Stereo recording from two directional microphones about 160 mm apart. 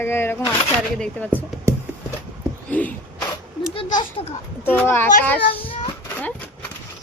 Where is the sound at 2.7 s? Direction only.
10° left (ahead or behind).